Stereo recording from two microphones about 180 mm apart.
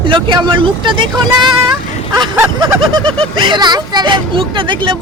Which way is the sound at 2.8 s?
25° right (ahead or behind).